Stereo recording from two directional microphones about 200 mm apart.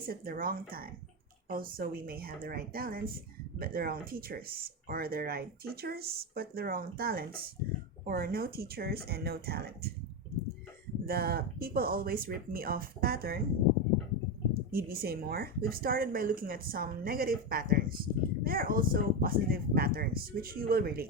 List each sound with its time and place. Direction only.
0.0 s speech: 45° right (ahead or behind)
11.0 s speech: 50° right (ahead or behind)
14.7 s speech: 50° right (ahead or behind)